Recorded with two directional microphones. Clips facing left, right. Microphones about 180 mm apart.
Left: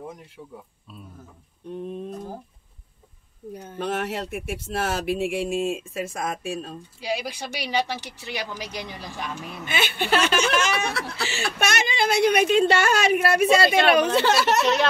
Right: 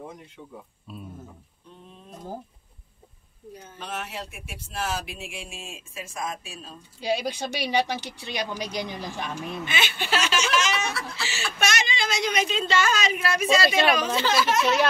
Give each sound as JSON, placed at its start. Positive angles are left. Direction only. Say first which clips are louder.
{"t": 3.6, "sound": "a woman's voice", "louder": "left 9 dB", "side_deg": 60}
{"t": 8.3, "sound": "speech", "louder": "right 1 dB", "side_deg": -20}
{"t": 9.7, "sound": "a woman's voice", "louder": "left 6 dB", "side_deg": 50}